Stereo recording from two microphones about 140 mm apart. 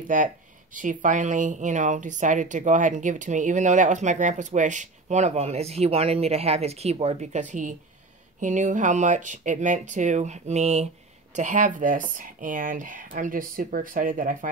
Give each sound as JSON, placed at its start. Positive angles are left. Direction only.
{"t": 0.1, "sound": "a woman's voice", "side_deg": -70}
{"t": 11.3, "sound": "speech", "side_deg": -65}